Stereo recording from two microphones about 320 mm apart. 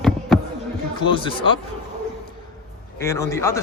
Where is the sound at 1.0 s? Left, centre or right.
Centre.